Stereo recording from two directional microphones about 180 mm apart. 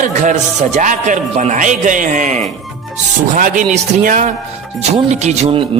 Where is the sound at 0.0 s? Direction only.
45° right (ahead or behind).